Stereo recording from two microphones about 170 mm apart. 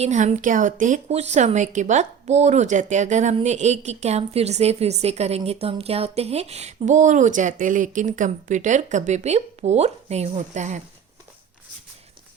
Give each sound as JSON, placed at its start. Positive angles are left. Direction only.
{"t": 0.0, "sound": "a woman's voice", "side_deg": -40}